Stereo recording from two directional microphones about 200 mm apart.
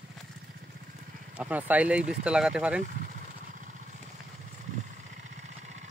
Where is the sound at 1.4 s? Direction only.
10° right (ahead or behind).